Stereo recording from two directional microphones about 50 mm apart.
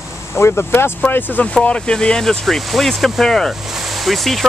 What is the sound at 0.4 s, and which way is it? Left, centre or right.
Speech, left.